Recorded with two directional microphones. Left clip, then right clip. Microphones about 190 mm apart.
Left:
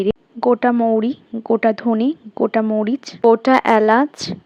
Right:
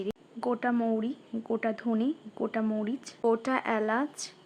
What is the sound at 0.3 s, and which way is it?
Speech, 35° left (ahead or behind).